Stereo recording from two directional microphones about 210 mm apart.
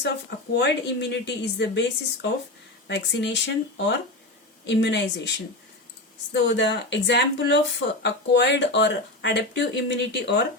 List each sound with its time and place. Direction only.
0.0 s speech: 55° left (ahead or behind)
2.8 s speech: 55° left (ahead or behind)
6.3 s speech: 55° left (ahead or behind)